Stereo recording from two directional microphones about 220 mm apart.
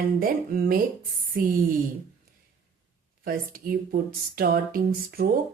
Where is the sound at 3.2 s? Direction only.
40° right (ahead or behind).